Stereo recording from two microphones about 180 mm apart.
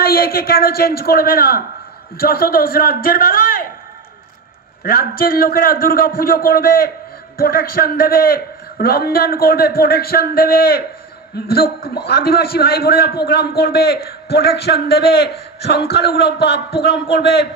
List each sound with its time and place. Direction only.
0.0 s a man's voice: 55° left (ahead or behind)
4.8 s a man's voice: 55° left (ahead or behind)